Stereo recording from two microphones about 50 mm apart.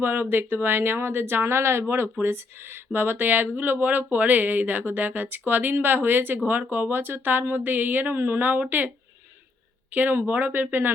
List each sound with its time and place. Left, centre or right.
0.0 s speech: right
9.9 s speech: right